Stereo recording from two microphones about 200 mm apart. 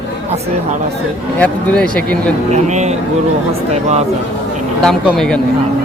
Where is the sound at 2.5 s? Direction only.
35° right (ahead or behind).